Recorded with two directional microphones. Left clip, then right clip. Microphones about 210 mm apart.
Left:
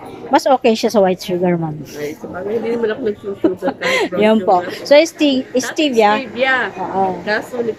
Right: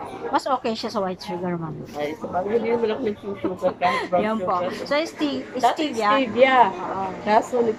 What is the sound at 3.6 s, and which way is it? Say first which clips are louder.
A woman's voice: left 5 dB; 50° left (ahead or behind).